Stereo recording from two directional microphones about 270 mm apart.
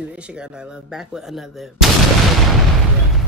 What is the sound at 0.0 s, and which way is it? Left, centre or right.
Speech, centre.